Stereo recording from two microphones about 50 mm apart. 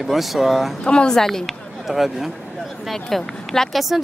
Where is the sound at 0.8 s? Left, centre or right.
Left.